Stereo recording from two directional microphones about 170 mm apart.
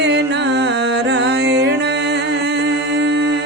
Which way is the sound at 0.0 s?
90° right.